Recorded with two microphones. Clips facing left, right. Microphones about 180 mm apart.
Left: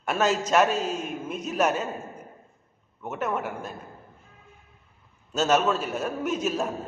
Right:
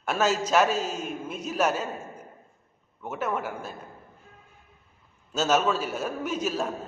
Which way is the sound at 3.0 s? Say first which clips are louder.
Left 1 dB; centre (ahead or behind).